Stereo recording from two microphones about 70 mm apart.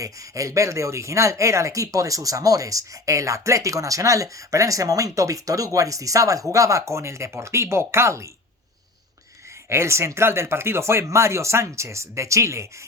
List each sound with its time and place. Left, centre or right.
0.0 s speech: right
9.6 s speech: right